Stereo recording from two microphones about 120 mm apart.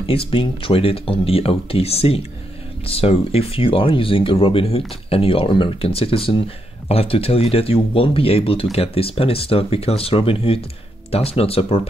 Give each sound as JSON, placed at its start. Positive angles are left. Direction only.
{"t": 0.0, "sound": "speech", "side_deg": 50}